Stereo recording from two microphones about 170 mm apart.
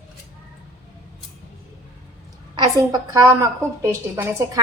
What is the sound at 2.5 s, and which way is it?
A woman's voice, 25° right (ahead or behind).